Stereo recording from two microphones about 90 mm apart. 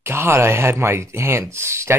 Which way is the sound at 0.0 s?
30° right (ahead or behind).